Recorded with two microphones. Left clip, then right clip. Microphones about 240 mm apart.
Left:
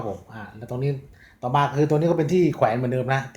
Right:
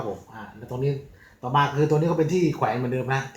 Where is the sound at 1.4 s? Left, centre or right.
Left.